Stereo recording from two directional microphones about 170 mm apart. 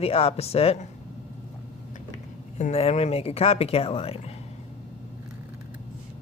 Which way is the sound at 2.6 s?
40° left (ahead or behind).